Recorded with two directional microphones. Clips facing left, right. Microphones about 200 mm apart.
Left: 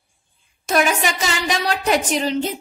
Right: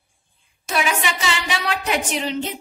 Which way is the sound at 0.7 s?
40° left (ahead or behind).